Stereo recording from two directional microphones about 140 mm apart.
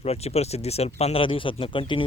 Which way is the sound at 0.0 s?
45° left (ahead or behind).